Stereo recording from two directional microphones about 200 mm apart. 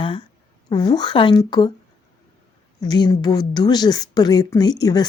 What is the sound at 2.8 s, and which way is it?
A woman's voice, 20° left (ahead or behind).